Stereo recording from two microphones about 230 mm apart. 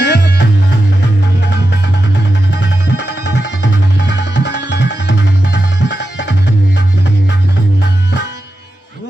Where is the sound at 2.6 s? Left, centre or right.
Left.